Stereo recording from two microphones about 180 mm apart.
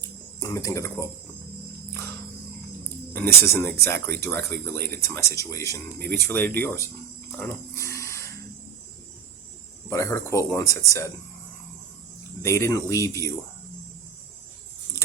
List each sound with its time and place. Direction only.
0.3 s speech: 15° left (ahead or behind)
3.4 s speech: 15° left (ahead or behind)
7.3 s dog: 10° left (ahead or behind)
9.9 s speech: 15° left (ahead or behind)
12.4 s speech: 15° left (ahead or behind)